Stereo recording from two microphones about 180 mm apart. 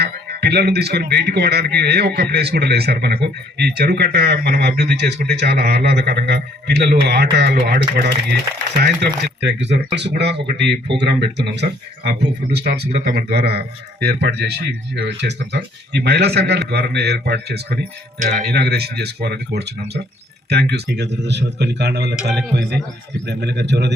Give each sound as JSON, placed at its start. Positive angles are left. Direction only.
{"t": 0.0, "sound": "a man's voice", "side_deg": -65}
{"t": 22.1, "sound": "a man's voice", "side_deg": -5}
{"t": 23.2, "sound": "speech", "side_deg": -70}